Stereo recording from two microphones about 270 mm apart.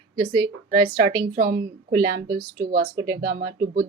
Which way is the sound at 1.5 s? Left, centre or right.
Centre.